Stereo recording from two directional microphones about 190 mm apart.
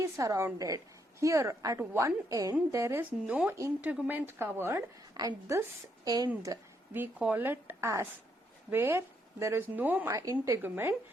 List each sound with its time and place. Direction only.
0.0 s a woman's voice: 15° right (ahead or behind)